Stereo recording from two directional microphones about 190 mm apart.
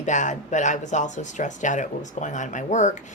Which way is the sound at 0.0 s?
40° left (ahead or behind).